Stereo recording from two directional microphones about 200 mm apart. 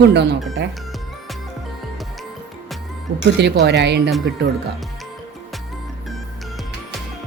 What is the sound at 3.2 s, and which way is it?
Speech, 60° right (ahead or behind).